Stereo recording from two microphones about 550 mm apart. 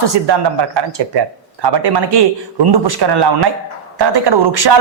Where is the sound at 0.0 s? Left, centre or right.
Right.